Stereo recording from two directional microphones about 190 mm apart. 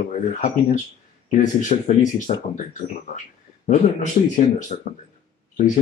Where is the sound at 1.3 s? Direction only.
40° left (ahead or behind).